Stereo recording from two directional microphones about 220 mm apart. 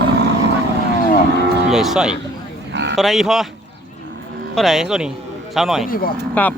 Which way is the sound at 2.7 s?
55° right (ahead or behind).